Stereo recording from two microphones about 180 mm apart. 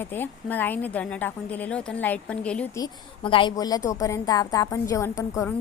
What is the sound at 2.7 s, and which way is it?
Speech, 25° left (ahead or behind).